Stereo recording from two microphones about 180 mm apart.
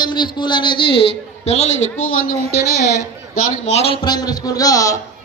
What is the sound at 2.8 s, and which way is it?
Speech, 65° left (ahead or behind).